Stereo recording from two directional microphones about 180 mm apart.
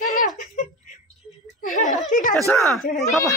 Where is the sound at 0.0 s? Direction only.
50° left (ahead or behind).